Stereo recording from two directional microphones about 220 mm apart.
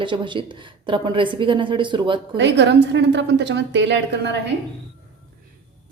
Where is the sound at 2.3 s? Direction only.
50° right (ahead or behind).